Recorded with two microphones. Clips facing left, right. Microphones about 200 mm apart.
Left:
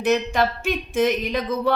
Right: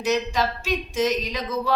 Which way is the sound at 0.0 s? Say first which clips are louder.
Left 3 dB; 55° left (ahead or behind).